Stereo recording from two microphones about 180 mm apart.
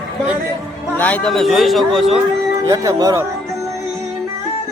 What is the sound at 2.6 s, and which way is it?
Speech, 20° right (ahead or behind).